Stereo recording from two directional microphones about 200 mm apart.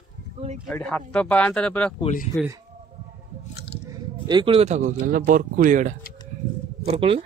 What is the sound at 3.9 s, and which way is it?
Speech, 20° right (ahead or behind).